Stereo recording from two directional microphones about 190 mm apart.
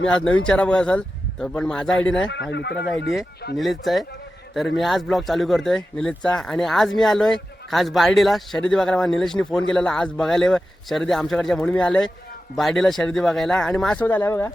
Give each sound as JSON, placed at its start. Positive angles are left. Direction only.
{"t": 0.0, "sound": "speech", "side_deg": 5}
{"t": 2.2, "sound": "speech", "side_deg": 65}
{"t": 3.6, "sound": "speech", "side_deg": 0}